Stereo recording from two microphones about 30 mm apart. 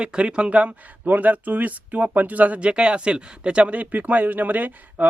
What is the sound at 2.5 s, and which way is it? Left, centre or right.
Speech, right.